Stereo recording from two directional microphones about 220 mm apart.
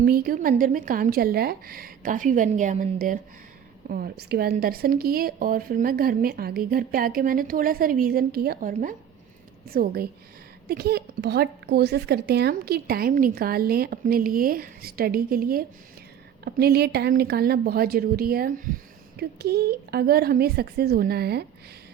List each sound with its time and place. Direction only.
0.0 s a woman's voice: 40° right (ahead or behind)